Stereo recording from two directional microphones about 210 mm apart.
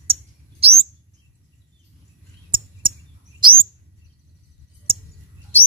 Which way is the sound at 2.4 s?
25° right (ahead or behind).